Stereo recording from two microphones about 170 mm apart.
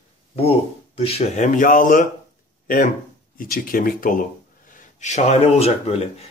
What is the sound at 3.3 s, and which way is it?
Speech, 55° left (ahead or behind).